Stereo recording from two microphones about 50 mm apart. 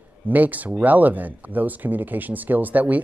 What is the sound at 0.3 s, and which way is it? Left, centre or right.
Speech, right.